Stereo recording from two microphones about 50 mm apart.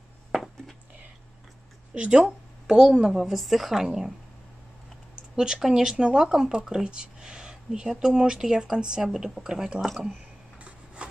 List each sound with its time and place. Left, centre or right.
0.3 s a sound: centre
2.0 s speech: right
2.2 s a sound: centre
3.0 s a woman's voice: centre
5.3 s speech: centre
9.8 s a woman's voice: centre
11.0 s wood: right